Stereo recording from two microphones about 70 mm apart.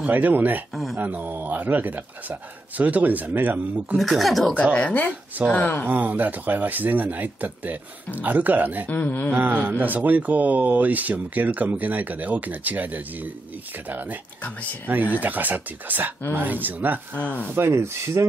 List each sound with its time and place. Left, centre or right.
0.0 s speech: right
4.0 s speech: centre
4.7 s a sound: centre
5.6 s speech: left
5.9 s speech: right
8.8 s a sound: left
9.3 s speech: right
15.1 s speech: right
17.1 s a sound: left
17.6 s rub: right